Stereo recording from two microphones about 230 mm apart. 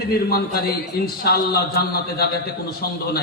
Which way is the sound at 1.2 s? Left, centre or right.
Left.